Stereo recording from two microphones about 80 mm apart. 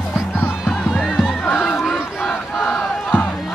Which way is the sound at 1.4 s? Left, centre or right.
Centre.